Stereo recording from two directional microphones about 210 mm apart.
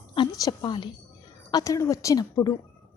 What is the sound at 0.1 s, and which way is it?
A woman's voice, 20° left (ahead or behind).